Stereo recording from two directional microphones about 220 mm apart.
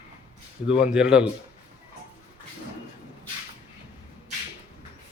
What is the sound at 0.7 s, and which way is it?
Speech, 5° right (ahead or behind).